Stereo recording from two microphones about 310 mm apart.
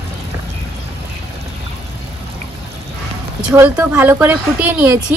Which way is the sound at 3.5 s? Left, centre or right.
Centre.